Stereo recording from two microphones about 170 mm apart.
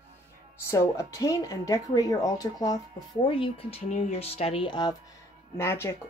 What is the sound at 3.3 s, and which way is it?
Speech, 30° left (ahead or behind).